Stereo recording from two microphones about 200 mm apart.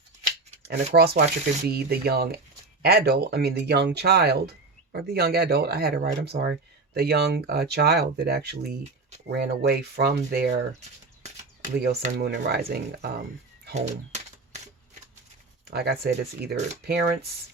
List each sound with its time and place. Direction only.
0.9 s speech: 50° right (ahead or behind)
10.8 s a sound: 35° right (ahead or behind)
12.1 s speech: 55° right (ahead or behind)
13.7 s typewriter: 35° right (ahead or behind)
15.6 s speech: 50° right (ahead or behind)